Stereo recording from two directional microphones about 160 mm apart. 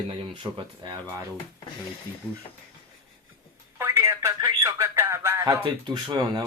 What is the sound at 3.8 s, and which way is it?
Telephone, 15° right (ahead or behind).